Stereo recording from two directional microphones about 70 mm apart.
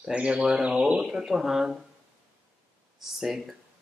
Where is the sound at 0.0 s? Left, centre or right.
Centre.